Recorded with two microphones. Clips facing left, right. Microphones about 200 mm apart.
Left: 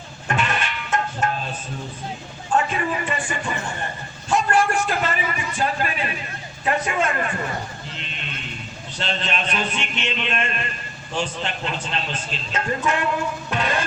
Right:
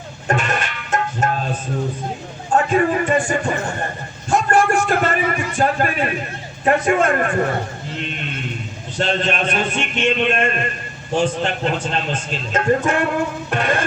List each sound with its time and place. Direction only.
0.3 s sheep: 45° right (ahead or behind)
1.2 s music: 45° right (ahead or behind)
2.7 s a man's voice: 45° right (ahead or behind)
4.3 s a sound: 50° right (ahead or behind)
6.7 s a man's voice: 50° right (ahead or behind)
9.0 s a man's voice: 50° right (ahead or behind)